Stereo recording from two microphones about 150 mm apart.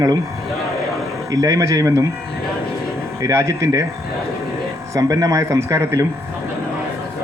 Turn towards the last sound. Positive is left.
turn(degrees=-20)  # may be behind; listen again after turning